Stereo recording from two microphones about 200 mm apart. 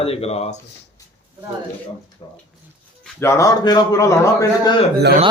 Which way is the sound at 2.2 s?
20° left (ahead or behind).